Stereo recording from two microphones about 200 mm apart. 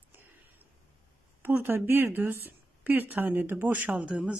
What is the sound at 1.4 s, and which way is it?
A woman's voice, 10° right (ahead or behind).